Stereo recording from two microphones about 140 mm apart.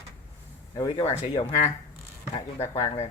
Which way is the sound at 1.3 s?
40° left (ahead or behind).